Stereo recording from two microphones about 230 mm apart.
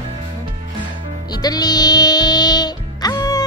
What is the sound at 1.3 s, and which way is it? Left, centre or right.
Speech, centre.